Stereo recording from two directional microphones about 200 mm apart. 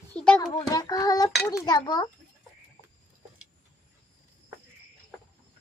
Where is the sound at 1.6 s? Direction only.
20° left (ahead or behind).